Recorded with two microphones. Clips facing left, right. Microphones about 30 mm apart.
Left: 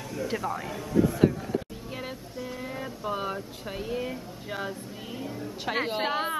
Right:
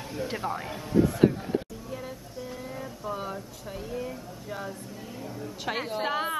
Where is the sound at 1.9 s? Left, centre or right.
Left.